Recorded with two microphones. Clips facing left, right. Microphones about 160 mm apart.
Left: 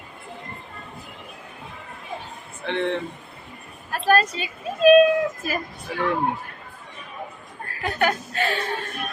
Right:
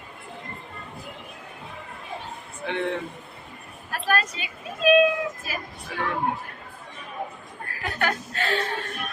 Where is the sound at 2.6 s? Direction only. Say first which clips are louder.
Left 3 dB; 5° right (ahead or behind).